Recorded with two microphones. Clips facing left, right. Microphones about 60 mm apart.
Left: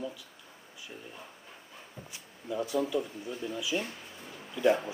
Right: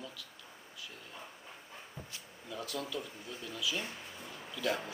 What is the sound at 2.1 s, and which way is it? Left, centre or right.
Speech, centre.